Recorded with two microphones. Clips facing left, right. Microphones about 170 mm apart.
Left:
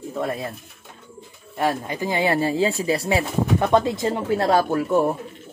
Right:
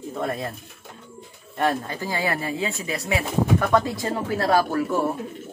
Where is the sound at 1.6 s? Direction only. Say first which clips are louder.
Left 1 dB; 15° left (ahead or behind).